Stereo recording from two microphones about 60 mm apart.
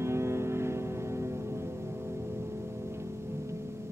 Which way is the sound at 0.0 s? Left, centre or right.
Right.